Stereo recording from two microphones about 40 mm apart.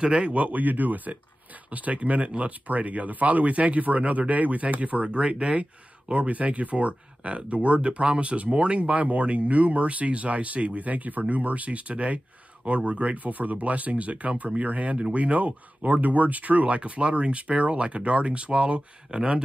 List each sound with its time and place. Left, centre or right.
0.0 s speech: right